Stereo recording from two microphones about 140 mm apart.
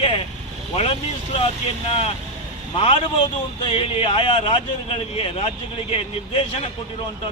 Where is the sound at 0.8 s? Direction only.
45° left (ahead or behind).